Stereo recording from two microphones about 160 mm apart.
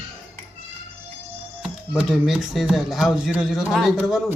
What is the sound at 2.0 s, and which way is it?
A man's voice, 5° right (ahead or behind).